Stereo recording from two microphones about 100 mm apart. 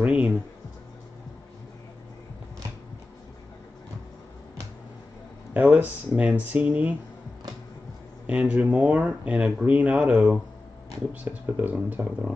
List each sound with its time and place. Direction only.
0.0 s music: 15° right (ahead or behind)
5.5 s speech: 15° right (ahead or behind)
8.3 s speech: 10° right (ahead or behind)